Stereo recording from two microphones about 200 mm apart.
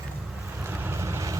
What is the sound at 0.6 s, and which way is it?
Vehicle, 10° right (ahead or behind).